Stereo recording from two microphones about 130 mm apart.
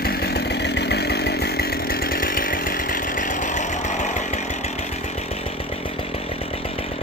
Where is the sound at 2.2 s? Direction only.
90° left; by 3.9 s 75° left (ahead or behind).